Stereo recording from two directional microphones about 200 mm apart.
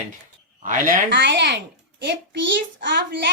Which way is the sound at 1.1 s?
60° right (ahead or behind).